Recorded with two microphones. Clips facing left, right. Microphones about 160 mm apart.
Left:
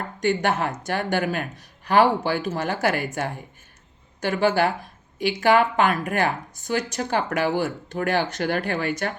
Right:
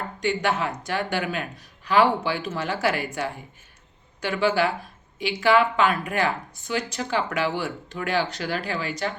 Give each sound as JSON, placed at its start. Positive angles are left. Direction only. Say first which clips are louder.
{"t": 0.2, "sound": "speech", "louder": "left 2 dB", "side_deg": 50}